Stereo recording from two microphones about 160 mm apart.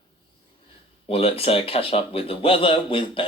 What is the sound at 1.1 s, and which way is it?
Speech, 35° left (ahead or behind).